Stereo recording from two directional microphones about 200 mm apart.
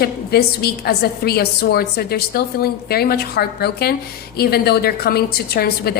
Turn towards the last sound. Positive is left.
turn(degrees=50)  # may be behind; listen again after turning